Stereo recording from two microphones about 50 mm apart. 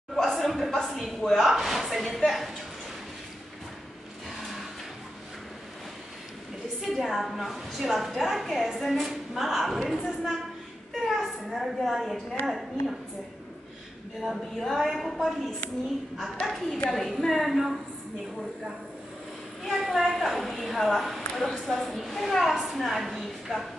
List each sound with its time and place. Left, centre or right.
0.1 s a sound: centre
0.7 s speech: centre
6.8 s a woman's voice: centre
10.9 s a sound: centre
12.4 s a woman's voice: centre
14.2 s a woman's voice: centre
16.4 s a woman's voice: centre
16.9 s a woman's voice: centre
19.6 s a woman's voice: centre